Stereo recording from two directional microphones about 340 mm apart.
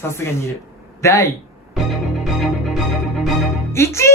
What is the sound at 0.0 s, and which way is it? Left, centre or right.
Speech, centre.